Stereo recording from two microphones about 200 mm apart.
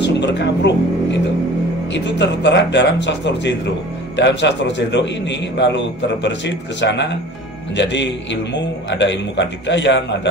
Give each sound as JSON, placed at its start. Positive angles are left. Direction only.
{"t": 0.0, "sound": "a man's voice", "side_deg": 60}